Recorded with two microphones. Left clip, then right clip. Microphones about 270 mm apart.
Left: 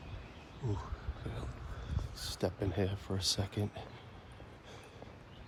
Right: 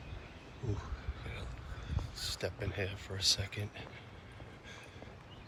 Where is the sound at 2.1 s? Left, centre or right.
Centre.